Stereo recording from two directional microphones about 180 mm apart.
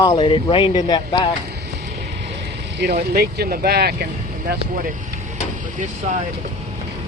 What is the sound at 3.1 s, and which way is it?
Speech, 55° right (ahead or behind).